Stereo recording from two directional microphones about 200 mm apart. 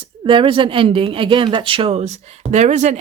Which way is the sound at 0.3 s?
25° right (ahead or behind).